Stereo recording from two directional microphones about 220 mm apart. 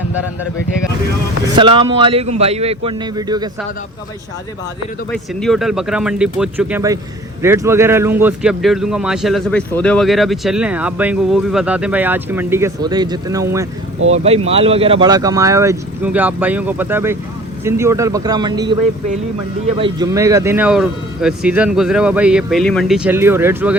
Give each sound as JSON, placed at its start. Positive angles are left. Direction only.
{"t": 1.5, "sound": "a man's voice", "side_deg": -20}
{"t": 5.1, "sound": "a man's voice", "side_deg": 0}
{"t": 14.1, "sound": "a man's voice", "side_deg": -25}
{"t": 19.8, "sound": "speech", "side_deg": -15}